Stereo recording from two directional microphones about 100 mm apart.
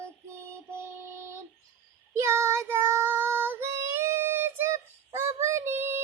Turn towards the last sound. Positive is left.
turn(degrees=-20)  # may be behind; listen again after turning